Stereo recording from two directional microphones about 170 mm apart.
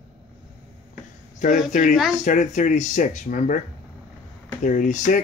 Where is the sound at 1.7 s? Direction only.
45° left (ahead or behind).